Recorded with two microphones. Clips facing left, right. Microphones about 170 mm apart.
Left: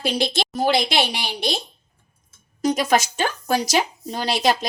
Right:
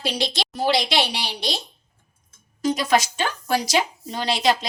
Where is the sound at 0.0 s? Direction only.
50° left (ahead or behind).